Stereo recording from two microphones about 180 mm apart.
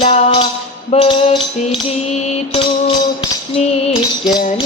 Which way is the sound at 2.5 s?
30° left (ahead or behind).